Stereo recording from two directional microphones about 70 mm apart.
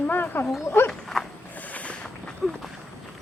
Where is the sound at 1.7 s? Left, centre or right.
Left.